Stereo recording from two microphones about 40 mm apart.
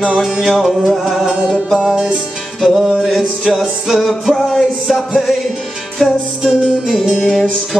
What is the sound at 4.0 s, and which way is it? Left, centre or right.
Music, centre.